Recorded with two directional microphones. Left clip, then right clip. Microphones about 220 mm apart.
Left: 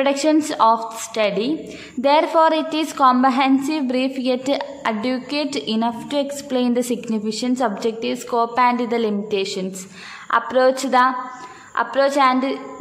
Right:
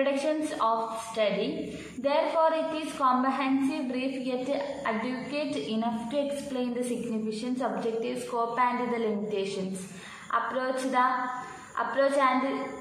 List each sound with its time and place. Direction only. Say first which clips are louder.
0.0 s a woman's voice: left 10 dB; 55° left (ahead or behind)